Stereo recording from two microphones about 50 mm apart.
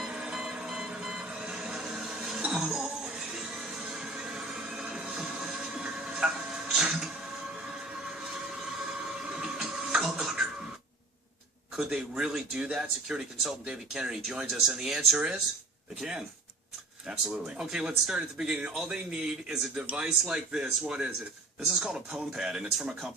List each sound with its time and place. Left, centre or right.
0.1 s a sound: centre
2.4 s music: centre
7.4 s train: centre
9.7 s music: centre
11.8 s speech: centre
12.5 s speech: right
17.6 s speech: centre